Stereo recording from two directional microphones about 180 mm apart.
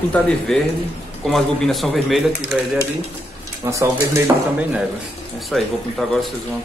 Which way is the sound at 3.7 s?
15° right (ahead or behind).